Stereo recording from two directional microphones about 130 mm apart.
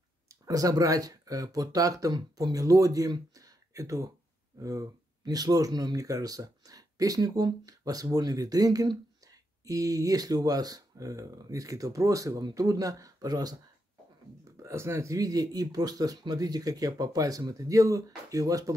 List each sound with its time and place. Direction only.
0.3 s speech: 30° right (ahead or behind)
14.6 s speech: 20° right (ahead or behind)